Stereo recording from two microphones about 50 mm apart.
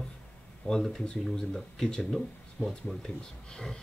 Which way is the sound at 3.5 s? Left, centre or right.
Centre.